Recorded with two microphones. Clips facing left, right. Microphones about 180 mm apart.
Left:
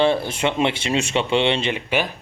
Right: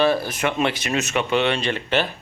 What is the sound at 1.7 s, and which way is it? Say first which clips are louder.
Speech: even; 15° left (ahead or behind).